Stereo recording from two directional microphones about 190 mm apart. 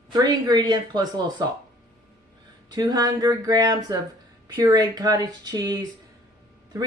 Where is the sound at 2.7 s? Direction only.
20° right (ahead or behind).